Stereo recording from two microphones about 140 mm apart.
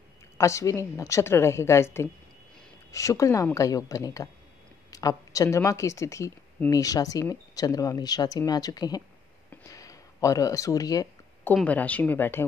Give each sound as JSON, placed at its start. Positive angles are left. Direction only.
{"t": 0.4, "sound": "speech", "side_deg": 20}
{"t": 2.9, "sound": "speech", "side_deg": 20}
{"t": 11.5, "sound": "speech", "side_deg": 10}